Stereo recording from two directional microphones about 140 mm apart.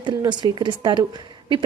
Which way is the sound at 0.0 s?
30° right (ahead or behind).